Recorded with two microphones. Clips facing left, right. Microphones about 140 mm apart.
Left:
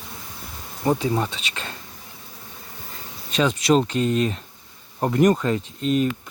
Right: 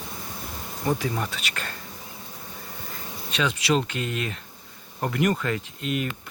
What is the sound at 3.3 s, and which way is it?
Speech, 35° left (ahead or behind).